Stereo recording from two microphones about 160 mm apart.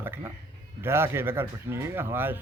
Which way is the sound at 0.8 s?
15° right (ahead or behind).